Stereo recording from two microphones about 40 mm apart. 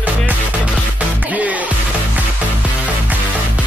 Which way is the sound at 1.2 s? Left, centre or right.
Right.